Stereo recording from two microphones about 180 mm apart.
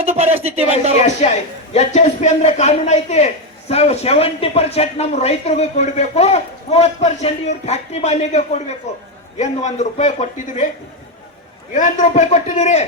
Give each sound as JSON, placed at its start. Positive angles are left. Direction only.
{"t": 0.0, "sound": "a sound", "side_deg": -35}
{"t": 1.0, "sound": "a man's voice", "side_deg": 40}
{"t": 11.7, "sound": "a man's voice", "side_deg": 45}